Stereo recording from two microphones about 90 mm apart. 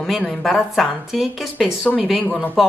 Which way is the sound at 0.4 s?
Centre (ahead or behind).